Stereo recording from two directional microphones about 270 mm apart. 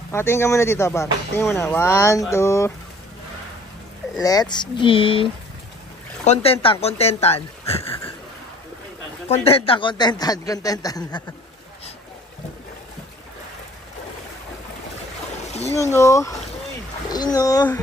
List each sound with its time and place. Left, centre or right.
0.1 s a man's voice: centre
4.2 s a man's voice: centre
9.3 s a man's voice: left
15.7 s a man's voice: centre